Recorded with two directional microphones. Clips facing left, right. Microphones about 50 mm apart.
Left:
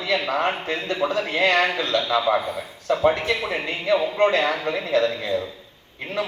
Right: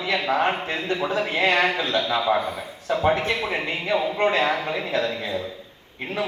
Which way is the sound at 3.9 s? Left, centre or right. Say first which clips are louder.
Left 1 dB; centre.